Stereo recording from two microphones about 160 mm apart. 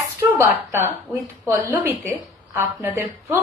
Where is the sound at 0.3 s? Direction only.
15° right (ahead or behind).